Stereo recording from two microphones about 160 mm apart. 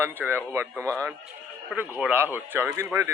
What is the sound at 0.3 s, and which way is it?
A man's voice, 15° right (ahead or behind).